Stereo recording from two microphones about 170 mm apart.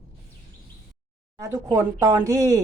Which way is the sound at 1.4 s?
15° right (ahead or behind).